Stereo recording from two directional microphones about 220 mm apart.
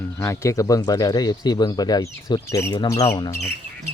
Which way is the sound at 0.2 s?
15° left (ahead or behind).